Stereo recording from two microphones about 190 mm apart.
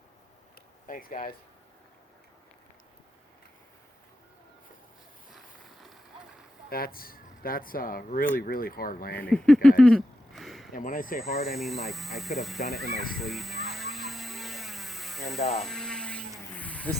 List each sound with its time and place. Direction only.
0.9 s speech: 45° left (ahead or behind)
6.7 s speech: 50° left (ahead or behind)
9.1 s speech: 5° left (ahead or behind)
9.6 s a sound: 5° left (ahead or behind)
10.7 s speech: 45° left (ahead or behind)
11.2 s speech: centre (ahead or behind)
12.8 s speech: 55° left (ahead or behind)
13.1 s mains hum: centre (ahead or behind)
15.5 s a sound: centre (ahead or behind)